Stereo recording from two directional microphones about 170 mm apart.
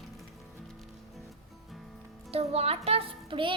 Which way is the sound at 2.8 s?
35° right (ahead or behind).